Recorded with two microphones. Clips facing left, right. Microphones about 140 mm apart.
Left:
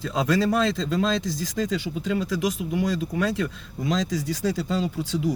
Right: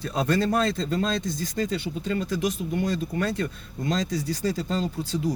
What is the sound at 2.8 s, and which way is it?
Speech, 90° left.